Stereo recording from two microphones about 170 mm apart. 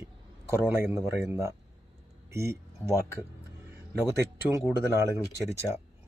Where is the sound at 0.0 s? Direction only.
15° right (ahead or behind).